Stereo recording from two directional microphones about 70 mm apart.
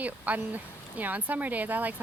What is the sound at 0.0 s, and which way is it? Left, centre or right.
Speech, right.